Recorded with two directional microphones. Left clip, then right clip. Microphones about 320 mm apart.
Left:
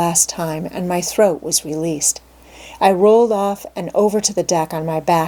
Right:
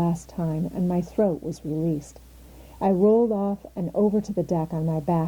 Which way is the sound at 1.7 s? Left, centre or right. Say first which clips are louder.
Left 1 dB; left.